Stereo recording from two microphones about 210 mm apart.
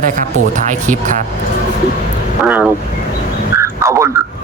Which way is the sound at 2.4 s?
5° right (ahead or behind).